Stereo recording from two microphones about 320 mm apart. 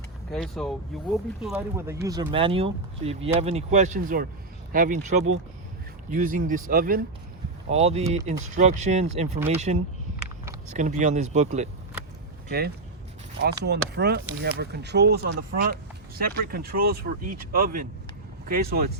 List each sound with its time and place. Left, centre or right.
0.3 s speech: centre; by 18.9 s right